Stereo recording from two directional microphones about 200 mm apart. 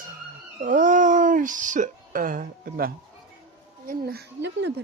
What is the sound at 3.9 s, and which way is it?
Speech, 50° right (ahead or behind).